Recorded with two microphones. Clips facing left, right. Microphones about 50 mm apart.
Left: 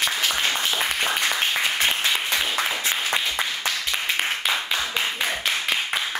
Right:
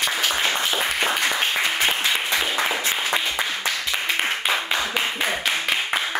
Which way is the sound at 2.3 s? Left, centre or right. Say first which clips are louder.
Right 2 dB; right.